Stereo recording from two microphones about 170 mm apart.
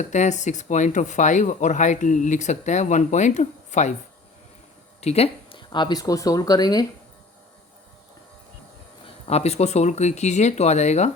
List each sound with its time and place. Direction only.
0.0 s speech: 45° left (ahead or behind)
4.9 s speech: 40° left (ahead or behind); by 6.8 s 25° left (ahead or behind)
9.0 s speech: 35° left (ahead or behind)